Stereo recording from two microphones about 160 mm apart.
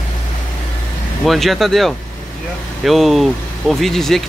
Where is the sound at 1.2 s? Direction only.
Centre (ahead or behind).